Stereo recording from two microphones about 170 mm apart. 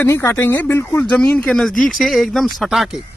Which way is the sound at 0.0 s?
15° left (ahead or behind).